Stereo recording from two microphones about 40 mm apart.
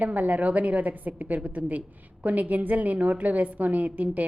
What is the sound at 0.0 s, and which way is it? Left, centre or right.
A woman's voice, right.